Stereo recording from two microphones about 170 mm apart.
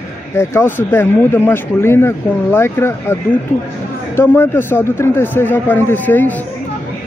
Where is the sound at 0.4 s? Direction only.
15° left (ahead or behind).